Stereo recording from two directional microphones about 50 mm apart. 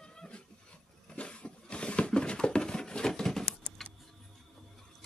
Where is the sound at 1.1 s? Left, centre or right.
Left.